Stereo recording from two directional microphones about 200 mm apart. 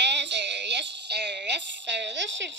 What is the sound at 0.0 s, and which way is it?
Music, 60° right (ahead or behind).